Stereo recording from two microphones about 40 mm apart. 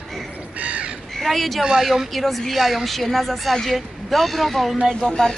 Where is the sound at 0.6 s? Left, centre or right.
Right.